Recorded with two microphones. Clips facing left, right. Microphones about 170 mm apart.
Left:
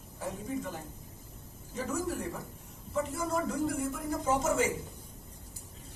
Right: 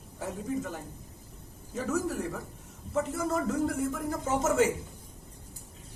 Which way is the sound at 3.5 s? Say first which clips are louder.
Right 3 dB; 60° right (ahead or behind).